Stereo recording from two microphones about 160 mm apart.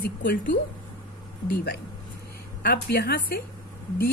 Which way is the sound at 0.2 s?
60° left (ahead or behind).